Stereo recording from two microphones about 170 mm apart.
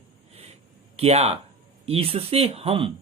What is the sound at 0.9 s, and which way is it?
Speech, 40° right (ahead or behind).